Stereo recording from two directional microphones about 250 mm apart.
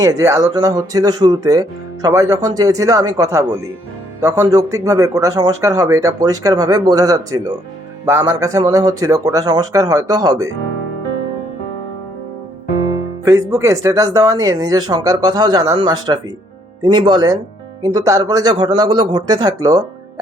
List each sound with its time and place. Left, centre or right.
0.0 s speech: centre
13.2 s speech: centre